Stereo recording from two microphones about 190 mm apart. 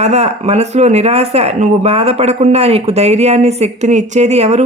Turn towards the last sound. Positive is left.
turn(degrees=-35)  # may be behind; listen again after turning